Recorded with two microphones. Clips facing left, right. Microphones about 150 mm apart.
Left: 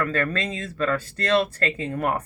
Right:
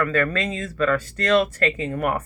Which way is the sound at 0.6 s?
30° left (ahead or behind).